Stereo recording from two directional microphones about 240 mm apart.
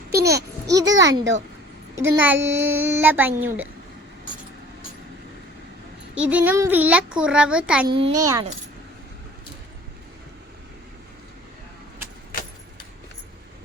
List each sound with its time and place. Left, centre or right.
0.1 s a sound: right
0.3 s a child's voice: centre
6.1 s a child's voice: centre
7.9 s a child's voice: right